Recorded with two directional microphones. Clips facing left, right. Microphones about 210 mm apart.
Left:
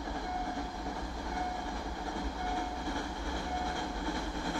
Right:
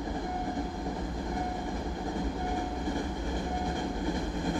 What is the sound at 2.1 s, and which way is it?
Train, 15° right (ahead or behind).